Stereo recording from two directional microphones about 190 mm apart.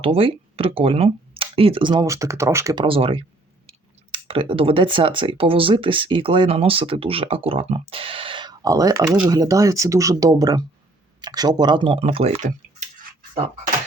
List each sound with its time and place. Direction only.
0.0 s speech: 30° right (ahead or behind)
2.8 s speech: 30° right (ahead or behind)